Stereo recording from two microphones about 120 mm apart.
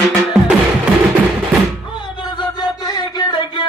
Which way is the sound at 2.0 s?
40° left (ahead or behind).